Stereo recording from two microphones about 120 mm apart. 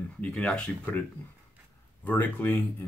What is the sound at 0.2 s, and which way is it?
Speech, 10° left (ahead or behind).